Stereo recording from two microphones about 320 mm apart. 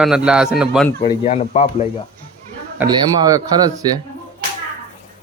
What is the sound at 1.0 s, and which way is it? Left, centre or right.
Speech, centre.